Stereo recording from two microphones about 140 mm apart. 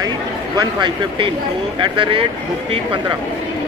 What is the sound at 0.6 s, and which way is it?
Speech, 35° right (ahead or behind).